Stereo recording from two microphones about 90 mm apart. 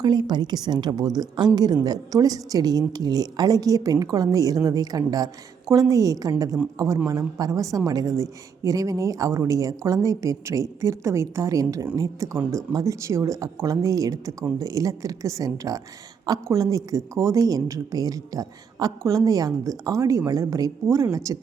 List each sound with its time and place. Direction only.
0.0 s a woman's voice: 50° right (ahead or behind); by 21.3 s 35° right (ahead or behind)